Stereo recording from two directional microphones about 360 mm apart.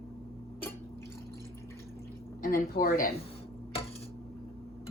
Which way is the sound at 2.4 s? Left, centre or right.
Left.